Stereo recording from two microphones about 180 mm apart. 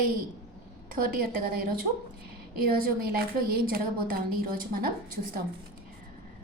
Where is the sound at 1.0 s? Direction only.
55° right (ahead or behind).